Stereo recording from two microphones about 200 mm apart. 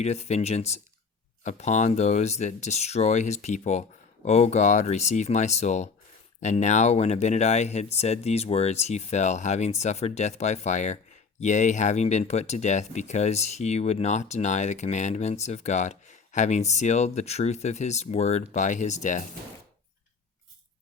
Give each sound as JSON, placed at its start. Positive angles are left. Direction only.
{"t": 0.0, "sound": "speech", "side_deg": 35}